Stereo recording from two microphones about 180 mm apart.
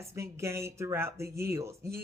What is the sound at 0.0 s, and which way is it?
Speech, 15° right (ahead or behind).